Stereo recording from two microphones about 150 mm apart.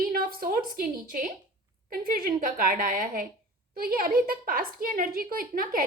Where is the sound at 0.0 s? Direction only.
75° right (ahead or behind).